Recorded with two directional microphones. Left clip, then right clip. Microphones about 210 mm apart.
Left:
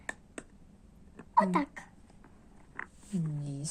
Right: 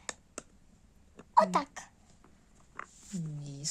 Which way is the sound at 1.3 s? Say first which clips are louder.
Right 1 dB; 30° right (ahead or behind).